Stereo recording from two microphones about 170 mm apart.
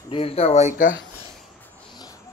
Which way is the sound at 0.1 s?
35° left (ahead or behind).